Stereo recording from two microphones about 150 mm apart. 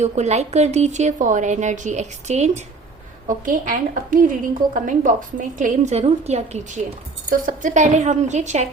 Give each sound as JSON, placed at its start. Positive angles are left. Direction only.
{"t": 0.0, "sound": "a woman's voice", "side_deg": -50}
{"t": 3.2, "sound": "a woman's voice", "side_deg": -60}
{"t": 7.3, "sound": "a woman's voice", "side_deg": -60}